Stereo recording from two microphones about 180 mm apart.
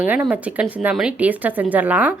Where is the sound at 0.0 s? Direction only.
10° right (ahead or behind).